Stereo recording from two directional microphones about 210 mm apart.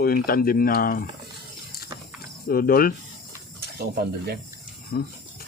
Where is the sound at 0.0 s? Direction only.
45° left (ahead or behind).